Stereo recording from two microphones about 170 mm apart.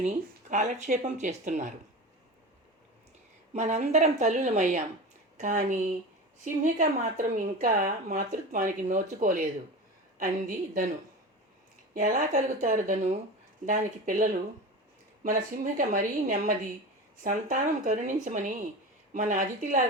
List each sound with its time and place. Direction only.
0.0 s speech: 40° right (ahead or behind)
3.5 s speech: 40° right (ahead or behind)
11.9 s speech: 50° right (ahead or behind)